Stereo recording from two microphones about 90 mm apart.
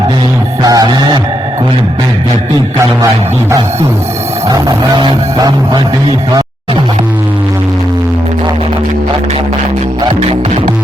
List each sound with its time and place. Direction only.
0.6 s music: 45° right (ahead or behind)
5.4 s music: 45° right (ahead or behind)